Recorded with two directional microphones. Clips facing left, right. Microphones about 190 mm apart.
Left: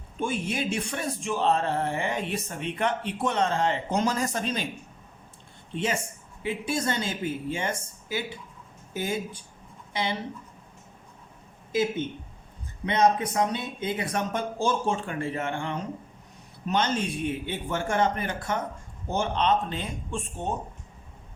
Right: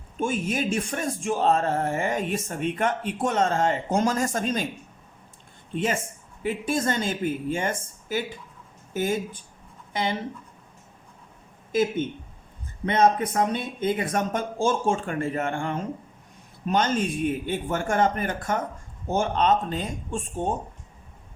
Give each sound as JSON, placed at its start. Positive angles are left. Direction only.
{"t": 0.2, "sound": "speech", "side_deg": -45}
{"t": 5.7, "sound": "speech", "side_deg": -50}
{"t": 11.7, "sound": "speech", "side_deg": -50}